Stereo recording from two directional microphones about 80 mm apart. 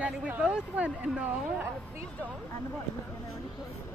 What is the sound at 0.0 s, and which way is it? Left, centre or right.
Speech, centre.